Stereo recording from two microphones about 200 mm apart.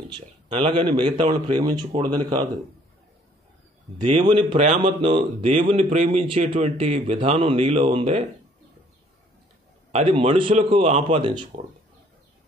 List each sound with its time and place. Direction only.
0.1 s speech: 25° right (ahead or behind)
4.2 s a man's voice: 25° right (ahead or behind)
9.9 s speech: 30° right (ahead or behind)